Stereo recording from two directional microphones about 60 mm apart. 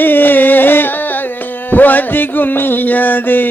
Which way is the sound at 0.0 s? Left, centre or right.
Left.